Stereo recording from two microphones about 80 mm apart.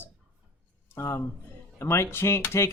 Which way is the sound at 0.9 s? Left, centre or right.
Left.